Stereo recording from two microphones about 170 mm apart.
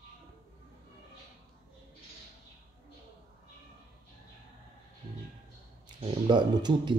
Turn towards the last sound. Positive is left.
turn(degrees=-25)  # may be behind; listen again after turning